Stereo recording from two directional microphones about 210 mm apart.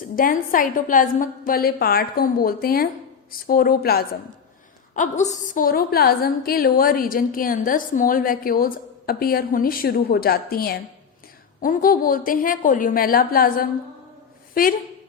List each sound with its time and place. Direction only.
0.0 s a woman's voice: 40° left (ahead or behind)
4.9 s a woman's voice: 35° left (ahead or behind)